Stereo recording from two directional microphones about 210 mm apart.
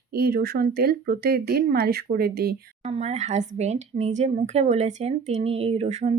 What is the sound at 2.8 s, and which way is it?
Speech, 30° right (ahead or behind).